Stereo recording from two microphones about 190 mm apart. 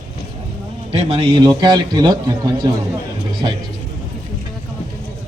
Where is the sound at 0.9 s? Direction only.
30° right (ahead or behind).